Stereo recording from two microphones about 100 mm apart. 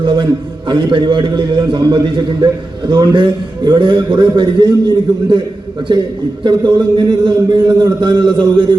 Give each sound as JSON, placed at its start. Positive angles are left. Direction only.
{"t": 0.0, "sound": "a man's voice", "side_deg": -55}
{"t": 5.9, "sound": "a man's voice", "side_deg": -50}